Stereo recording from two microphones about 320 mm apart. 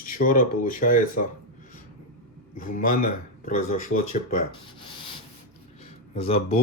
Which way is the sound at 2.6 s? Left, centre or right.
Left.